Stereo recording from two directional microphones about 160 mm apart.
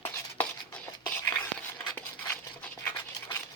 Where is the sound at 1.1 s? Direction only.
10° left (ahead or behind).